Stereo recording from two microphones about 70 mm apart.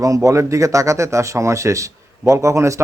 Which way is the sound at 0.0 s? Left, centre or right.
Right.